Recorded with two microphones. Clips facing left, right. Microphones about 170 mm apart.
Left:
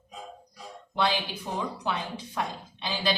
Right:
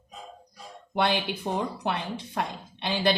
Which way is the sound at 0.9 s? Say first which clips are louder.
Right 2 dB; 55° right (ahead or behind).